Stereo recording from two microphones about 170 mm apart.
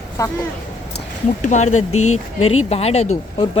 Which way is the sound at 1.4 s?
45° left (ahead or behind).